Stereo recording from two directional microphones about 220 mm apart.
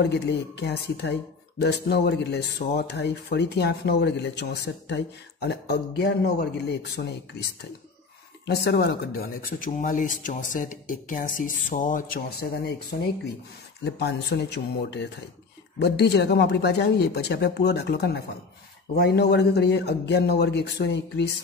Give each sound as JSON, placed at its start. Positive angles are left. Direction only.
{"t": 0.0, "sound": "speech", "side_deg": 50}
{"t": 8.5, "sound": "speech", "side_deg": 45}
{"t": 13.8, "sound": "speech", "side_deg": 50}